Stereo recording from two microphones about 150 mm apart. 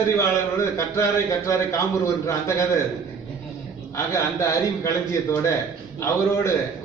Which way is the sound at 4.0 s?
20° left (ahead or behind).